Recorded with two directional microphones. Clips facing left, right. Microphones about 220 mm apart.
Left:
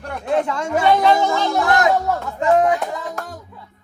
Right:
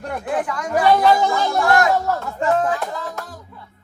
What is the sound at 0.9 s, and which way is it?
Speech, centre (ahead or behind).